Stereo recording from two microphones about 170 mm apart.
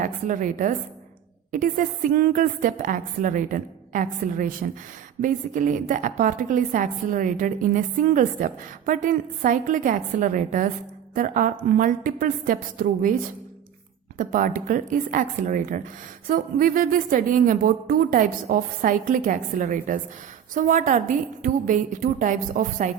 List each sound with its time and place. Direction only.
0.0 s a woman's voice: 50° right (ahead or behind)
14.2 s a woman's voice: 50° right (ahead or behind)